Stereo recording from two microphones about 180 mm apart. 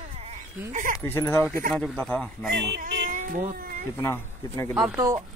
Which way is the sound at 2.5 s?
70° right (ahead or behind).